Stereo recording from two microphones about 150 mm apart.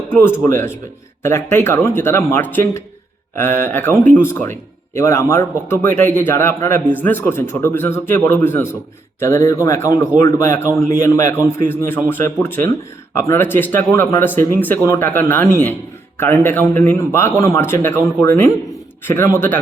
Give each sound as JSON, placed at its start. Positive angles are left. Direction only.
{"t": 0.4, "sound": "speech", "side_deg": 15}